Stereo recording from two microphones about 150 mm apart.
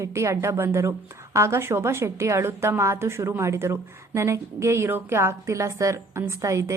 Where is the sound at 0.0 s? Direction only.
20° right (ahead or behind).